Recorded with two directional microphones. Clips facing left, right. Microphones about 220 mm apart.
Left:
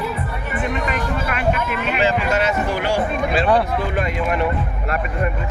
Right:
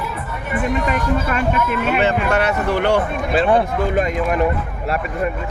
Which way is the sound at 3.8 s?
40° right (ahead or behind).